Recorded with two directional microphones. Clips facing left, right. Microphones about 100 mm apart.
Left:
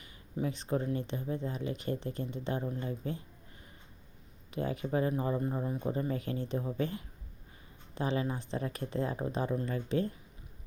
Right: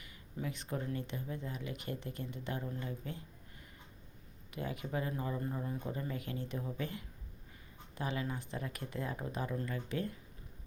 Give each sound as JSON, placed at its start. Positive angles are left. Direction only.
{"t": 0.0, "sound": "speech", "side_deg": 30}
{"t": 4.5, "sound": "speech", "side_deg": 35}